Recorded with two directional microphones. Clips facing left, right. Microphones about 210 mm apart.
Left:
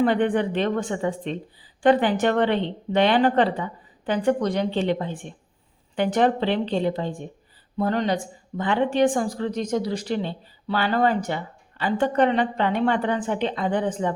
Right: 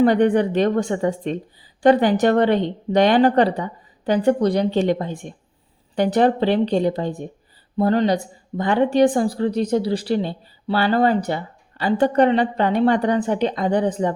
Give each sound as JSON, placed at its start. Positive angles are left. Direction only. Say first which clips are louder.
{"t": 0.0, "sound": "speech", "louder": "right 5 dB", "side_deg": -40}